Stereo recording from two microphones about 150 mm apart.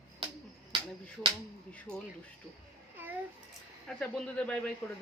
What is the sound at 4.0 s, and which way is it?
Speech, 5° left (ahead or behind).